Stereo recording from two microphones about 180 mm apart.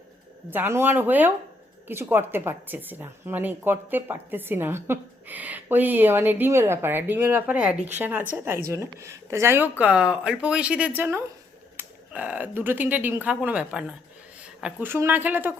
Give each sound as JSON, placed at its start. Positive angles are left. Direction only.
{"t": 0.5, "sound": "speech", "side_deg": -10}